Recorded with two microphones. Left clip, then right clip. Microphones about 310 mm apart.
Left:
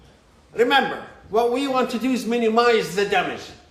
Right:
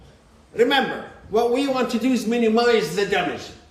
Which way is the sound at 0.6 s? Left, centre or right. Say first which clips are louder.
Left 1 dB; centre.